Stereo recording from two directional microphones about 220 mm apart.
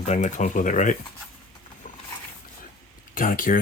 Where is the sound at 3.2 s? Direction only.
40° left (ahead or behind).